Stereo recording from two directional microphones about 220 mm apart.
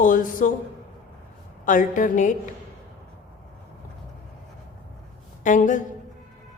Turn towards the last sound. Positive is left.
turn(degrees=35)  # may be behind; listen again after turning